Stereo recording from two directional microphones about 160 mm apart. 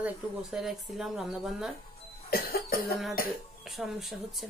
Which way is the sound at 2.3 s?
70° left (ahead or behind).